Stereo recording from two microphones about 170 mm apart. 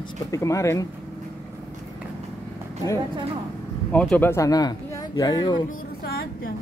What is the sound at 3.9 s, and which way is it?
Speech, 10° left (ahead or behind).